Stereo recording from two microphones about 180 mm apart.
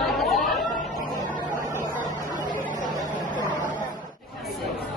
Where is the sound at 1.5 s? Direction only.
45° left (ahead or behind).